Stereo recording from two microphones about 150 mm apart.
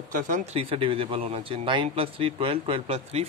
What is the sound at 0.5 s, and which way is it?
Speech, 40° right (ahead or behind).